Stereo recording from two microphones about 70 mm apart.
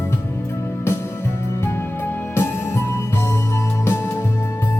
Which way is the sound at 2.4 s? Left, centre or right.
Left.